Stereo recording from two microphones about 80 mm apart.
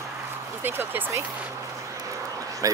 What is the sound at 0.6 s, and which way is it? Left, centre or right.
Speech, right.